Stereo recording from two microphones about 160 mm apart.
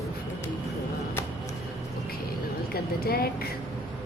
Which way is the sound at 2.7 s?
75° left (ahead or behind).